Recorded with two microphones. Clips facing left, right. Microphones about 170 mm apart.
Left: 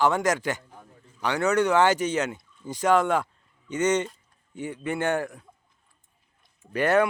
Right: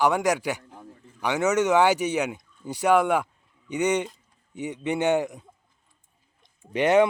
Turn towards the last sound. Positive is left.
turn(degrees=-20)  # may be behind; listen again after turning